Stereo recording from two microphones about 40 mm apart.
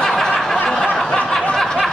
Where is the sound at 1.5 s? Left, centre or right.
Centre.